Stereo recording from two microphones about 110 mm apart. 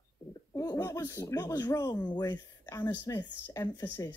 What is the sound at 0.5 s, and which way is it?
Speech, 30° left (ahead or behind).